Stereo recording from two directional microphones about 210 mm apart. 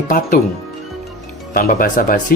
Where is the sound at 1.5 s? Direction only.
45° left (ahead or behind).